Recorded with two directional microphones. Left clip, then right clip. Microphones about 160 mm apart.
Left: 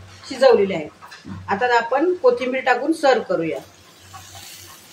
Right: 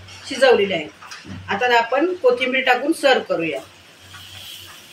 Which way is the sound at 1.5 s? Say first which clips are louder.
Right 1 dB; 25° left (ahead or behind).